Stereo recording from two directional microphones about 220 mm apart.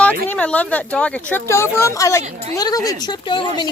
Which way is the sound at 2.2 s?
30° right (ahead or behind).